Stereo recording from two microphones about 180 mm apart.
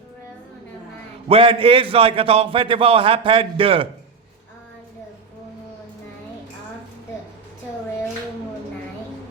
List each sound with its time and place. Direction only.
1.3 s a man's voice: 30° right (ahead or behind)